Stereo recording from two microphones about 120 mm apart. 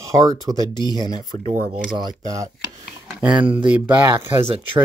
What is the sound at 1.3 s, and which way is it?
Speech, 90° right.